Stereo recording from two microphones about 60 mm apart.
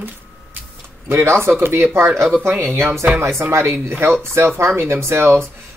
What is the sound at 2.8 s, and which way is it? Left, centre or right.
Speech, right.